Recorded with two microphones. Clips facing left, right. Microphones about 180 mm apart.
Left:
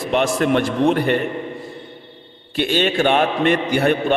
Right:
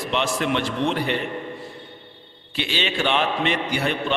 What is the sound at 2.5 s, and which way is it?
A man's voice, 50° left (ahead or behind).